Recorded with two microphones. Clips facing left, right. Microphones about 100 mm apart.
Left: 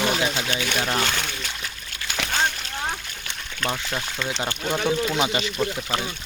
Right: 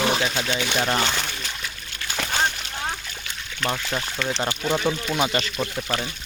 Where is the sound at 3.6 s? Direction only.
10° right (ahead or behind).